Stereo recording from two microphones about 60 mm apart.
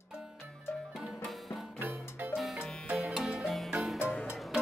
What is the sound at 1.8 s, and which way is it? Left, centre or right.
Music, right.